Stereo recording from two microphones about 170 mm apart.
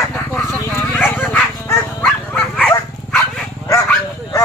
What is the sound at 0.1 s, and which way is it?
Dog, 15° left (ahead or behind).